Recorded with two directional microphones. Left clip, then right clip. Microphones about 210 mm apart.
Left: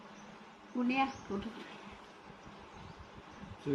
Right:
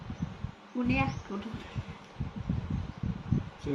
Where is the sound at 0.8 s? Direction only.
Centre (ahead or behind).